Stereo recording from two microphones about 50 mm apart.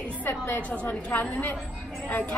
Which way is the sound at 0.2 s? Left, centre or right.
Left.